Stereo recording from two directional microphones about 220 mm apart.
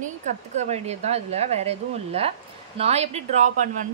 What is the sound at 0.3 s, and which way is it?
A woman's voice, 35° right (ahead or behind).